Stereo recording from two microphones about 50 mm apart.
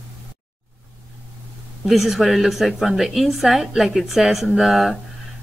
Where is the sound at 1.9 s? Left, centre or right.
Centre.